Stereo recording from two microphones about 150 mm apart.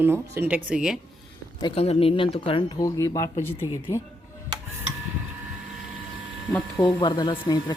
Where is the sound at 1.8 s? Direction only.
40° left (ahead or behind); by 4.0 s 25° left (ahead or behind).